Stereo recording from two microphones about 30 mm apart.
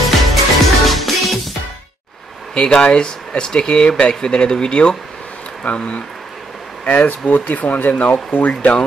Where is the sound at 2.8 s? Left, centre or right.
Left.